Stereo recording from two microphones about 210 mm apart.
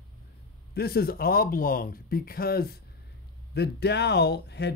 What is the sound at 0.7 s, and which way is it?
Speech, 50° left (ahead or behind).